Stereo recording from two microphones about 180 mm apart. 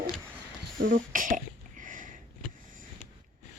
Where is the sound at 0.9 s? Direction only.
50° right (ahead or behind).